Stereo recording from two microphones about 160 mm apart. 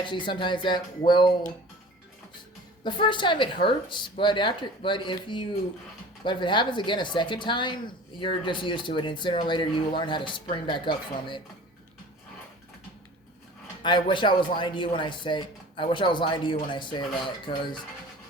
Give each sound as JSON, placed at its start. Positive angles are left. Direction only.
{"t": 0.0, "sound": "speech", "side_deg": 30}
{"t": 2.8, "sound": "speech", "side_deg": 30}
{"t": 13.8, "sound": "speech", "side_deg": 30}